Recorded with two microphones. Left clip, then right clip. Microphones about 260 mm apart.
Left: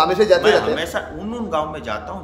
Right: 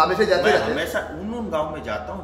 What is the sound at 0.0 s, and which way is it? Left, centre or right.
Speech, left.